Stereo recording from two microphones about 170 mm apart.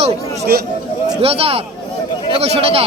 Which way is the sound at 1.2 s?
35° right (ahead or behind).